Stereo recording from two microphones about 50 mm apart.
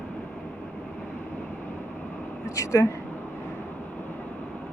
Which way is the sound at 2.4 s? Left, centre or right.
Left.